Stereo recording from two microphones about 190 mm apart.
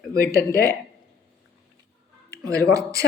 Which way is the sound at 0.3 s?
50° left (ahead or behind).